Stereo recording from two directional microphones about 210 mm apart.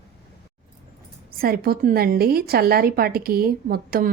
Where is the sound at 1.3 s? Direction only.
45° right (ahead or behind).